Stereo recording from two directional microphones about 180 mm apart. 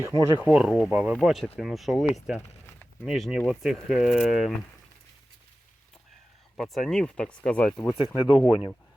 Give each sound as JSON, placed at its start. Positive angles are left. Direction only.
{"t": 0.0, "sound": "speech", "side_deg": -15}
{"t": 0.4, "sound": "speech", "side_deg": -5}
{"t": 6.6, "sound": "speech", "side_deg": 0}
{"t": 8.3, "sound": "speech", "side_deg": -5}